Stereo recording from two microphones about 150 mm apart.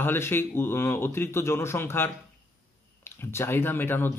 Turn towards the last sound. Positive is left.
turn(degrees=15)  # may be behind; listen again after turning